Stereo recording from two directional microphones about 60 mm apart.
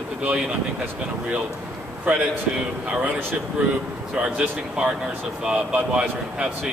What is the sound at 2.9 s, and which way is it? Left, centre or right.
Speech, right.